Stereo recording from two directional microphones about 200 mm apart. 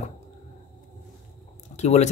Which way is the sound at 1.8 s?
35° left (ahead or behind).